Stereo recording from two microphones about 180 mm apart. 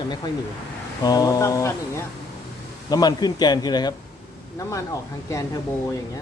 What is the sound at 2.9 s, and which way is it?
Speech, 20° left (ahead or behind).